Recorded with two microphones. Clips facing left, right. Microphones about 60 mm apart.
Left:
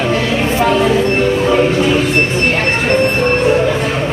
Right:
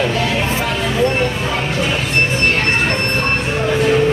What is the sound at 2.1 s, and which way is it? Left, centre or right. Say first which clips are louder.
Train: left 2 dB; left.